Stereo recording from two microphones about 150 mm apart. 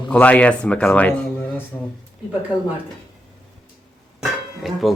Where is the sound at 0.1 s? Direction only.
10° left (ahead or behind).